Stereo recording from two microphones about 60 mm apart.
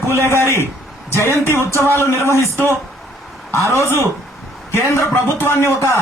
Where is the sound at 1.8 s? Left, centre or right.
Left.